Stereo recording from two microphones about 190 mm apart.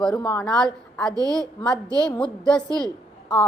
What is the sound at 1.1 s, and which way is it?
Speech, 20° right (ahead or behind).